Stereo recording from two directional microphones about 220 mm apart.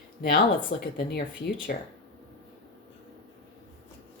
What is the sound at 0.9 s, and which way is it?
Speech, 45° left (ahead or behind).